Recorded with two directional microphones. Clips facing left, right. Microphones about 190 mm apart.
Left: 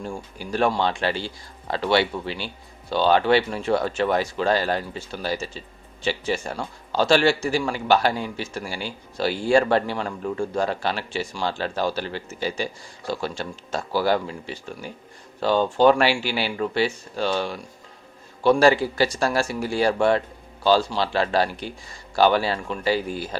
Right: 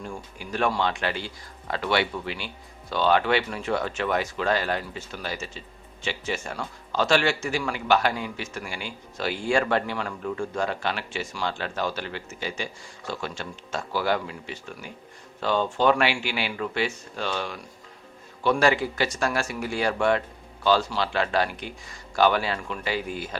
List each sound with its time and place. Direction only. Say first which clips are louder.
0.0 s speech: left 4 dB; 35° left (ahead or behind)